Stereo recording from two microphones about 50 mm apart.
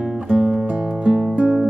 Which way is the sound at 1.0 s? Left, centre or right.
Right.